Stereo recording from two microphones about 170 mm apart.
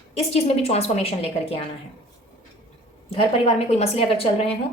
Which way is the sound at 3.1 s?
35° left (ahead or behind).